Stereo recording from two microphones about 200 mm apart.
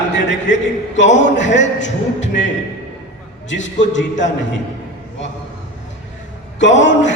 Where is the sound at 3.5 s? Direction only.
65° left (ahead or behind).